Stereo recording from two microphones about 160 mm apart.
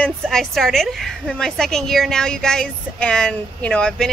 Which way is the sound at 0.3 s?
Centre (ahead or behind).